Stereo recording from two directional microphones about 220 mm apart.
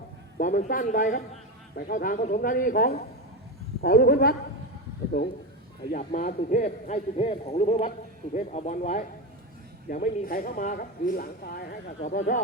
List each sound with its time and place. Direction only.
0.3 s speech: 40° left (ahead or behind)
5.9 s speech: 40° left (ahead or behind)